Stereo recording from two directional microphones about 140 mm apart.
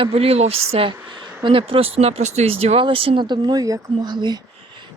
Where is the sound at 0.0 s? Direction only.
45° right (ahead or behind).